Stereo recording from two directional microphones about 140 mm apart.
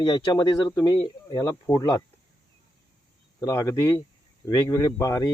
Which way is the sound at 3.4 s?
20° left (ahead or behind).